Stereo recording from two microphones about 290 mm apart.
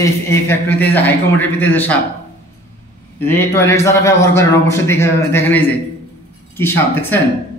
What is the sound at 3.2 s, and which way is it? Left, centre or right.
A man's voice, centre.